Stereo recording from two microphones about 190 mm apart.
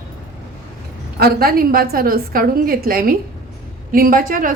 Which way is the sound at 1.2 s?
50° right (ahead or behind).